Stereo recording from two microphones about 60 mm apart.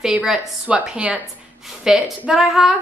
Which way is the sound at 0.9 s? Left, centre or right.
Centre.